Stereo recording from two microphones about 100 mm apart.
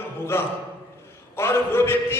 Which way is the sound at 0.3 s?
25° left (ahead or behind).